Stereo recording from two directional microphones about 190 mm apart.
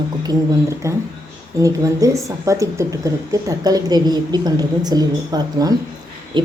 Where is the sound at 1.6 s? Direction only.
15° right (ahead or behind).